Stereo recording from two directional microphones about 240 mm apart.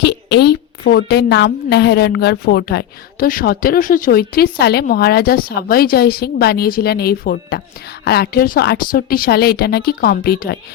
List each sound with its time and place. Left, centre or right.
0.0 s a woman's voice: left